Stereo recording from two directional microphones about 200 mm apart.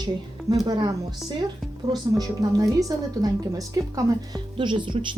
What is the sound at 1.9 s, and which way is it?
A woman's voice, 15° right (ahead or behind).